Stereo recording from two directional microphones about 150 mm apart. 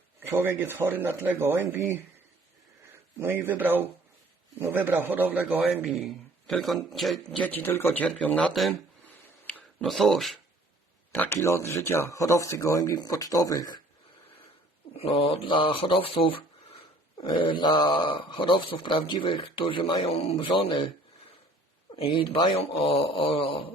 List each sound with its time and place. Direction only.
0.2 s speech: 15° right (ahead or behind)
3.2 s a man's voice: 15° right (ahead or behind); by 8.7 s 5° left (ahead or behind)
9.0 s a sound: 10° left (ahead or behind)
9.8 s a man's voice: centre (ahead or behind)
11.1 s speech: 15° left (ahead or behind)
14.9 s speech: 40° left (ahead or behind)
21.9 s speech: 35° left (ahead or behind)